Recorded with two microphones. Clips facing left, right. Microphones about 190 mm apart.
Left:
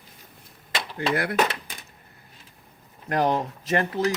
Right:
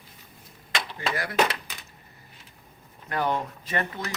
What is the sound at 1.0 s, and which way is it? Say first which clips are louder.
Speech: left 3 dB; 60° left (ahead or behind).